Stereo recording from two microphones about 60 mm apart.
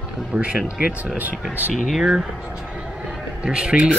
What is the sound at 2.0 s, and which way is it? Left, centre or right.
Speech, centre.